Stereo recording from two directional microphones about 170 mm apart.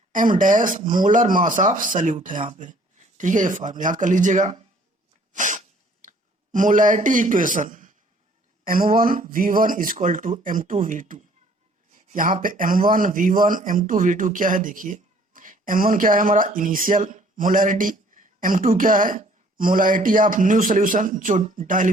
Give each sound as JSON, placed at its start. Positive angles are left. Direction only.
{"t": 0.1, "sound": "speech", "side_deg": -50}
{"t": 5.3, "sound": "a sound", "side_deg": -50}
{"t": 8.6, "sound": "speech", "side_deg": -55}